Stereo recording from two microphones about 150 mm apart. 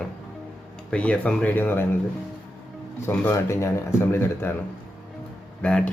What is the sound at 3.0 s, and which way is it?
Speech, 15° left (ahead or behind).